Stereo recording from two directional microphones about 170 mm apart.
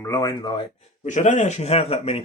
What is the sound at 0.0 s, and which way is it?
Speech, 20° left (ahead or behind).